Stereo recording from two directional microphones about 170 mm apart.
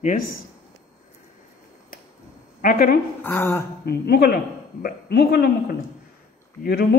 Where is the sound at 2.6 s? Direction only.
55° left (ahead or behind).